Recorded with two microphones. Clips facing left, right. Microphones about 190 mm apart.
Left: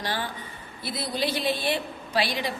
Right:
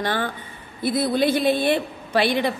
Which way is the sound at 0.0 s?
55° right (ahead or behind).